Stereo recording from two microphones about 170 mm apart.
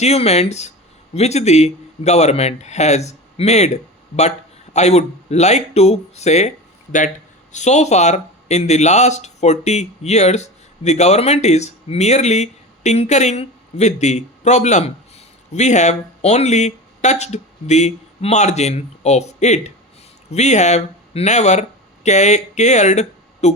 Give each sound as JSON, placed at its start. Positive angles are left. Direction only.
{"t": 0.0, "sound": "speech", "side_deg": 40}
{"t": 4.7, "sound": "speech", "side_deg": 40}
{"t": 7.5, "sound": "speech", "side_deg": 45}